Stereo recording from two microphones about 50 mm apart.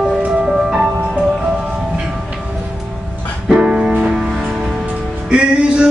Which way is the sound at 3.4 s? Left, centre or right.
Right.